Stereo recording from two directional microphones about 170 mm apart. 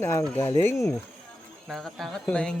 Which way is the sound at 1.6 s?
Centre (ahead or behind).